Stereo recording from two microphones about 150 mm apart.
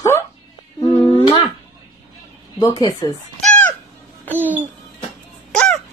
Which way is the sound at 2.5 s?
25° left (ahead or behind).